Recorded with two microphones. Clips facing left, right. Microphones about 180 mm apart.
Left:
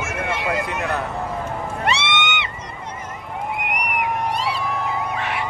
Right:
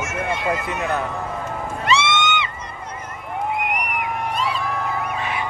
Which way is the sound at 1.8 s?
65° left (ahead or behind).